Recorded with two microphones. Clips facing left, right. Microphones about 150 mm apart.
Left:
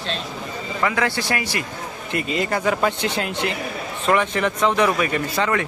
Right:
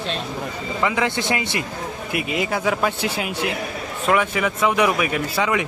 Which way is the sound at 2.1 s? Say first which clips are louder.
Left 1 dB; 10° right (ahead or behind).